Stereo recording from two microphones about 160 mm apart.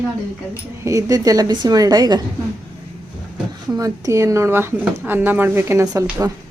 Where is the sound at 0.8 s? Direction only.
20° right (ahead or behind).